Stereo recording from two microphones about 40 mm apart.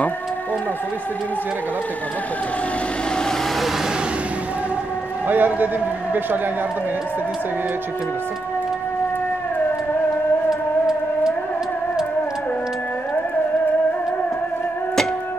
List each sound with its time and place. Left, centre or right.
5.3 s a man's voice: right